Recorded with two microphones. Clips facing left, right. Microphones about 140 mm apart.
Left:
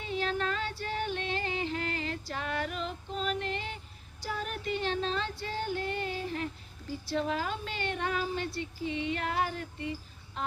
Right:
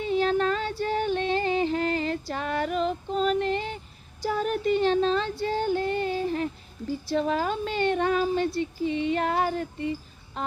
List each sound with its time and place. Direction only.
0.2 s music: 35° right (ahead or behind)
4.4 s female singing: 35° right (ahead or behind)
7.1 s speech: 40° right (ahead or behind)